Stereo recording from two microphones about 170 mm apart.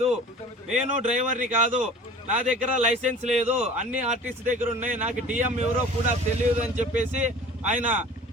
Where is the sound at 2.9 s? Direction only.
40° right (ahead or behind).